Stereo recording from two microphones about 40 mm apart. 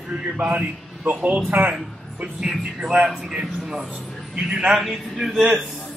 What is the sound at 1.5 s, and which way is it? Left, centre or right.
Speech, right.